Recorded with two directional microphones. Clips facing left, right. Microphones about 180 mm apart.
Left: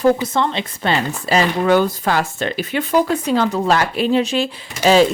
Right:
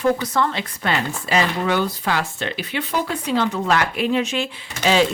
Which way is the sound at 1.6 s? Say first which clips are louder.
Left 6 dB; 45° left (ahead or behind).